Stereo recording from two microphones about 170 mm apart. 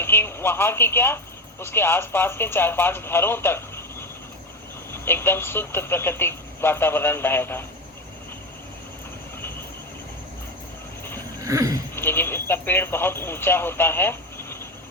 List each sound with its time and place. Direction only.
0.0 s speech: 15° left (ahead or behind)
5.0 s speech: 15° left (ahead or behind)
11.4 s a sound: 20° right (ahead or behind)
11.9 s speech: 15° left (ahead or behind)